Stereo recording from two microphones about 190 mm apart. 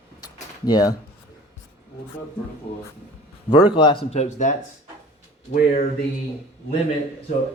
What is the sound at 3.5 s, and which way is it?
Speech, 25° left (ahead or behind).